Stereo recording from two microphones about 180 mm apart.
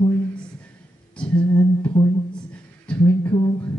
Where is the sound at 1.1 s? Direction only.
5° left (ahead or behind).